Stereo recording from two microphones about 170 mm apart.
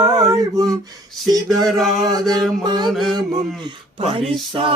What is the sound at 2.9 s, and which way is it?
Mantra, centre (ahead or behind).